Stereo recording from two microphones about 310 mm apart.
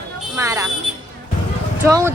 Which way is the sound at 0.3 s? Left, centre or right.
Centre.